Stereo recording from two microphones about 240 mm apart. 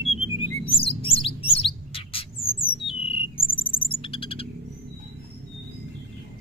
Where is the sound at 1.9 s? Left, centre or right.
Left.